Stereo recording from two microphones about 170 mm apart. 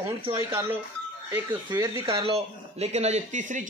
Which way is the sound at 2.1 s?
35° right (ahead or behind).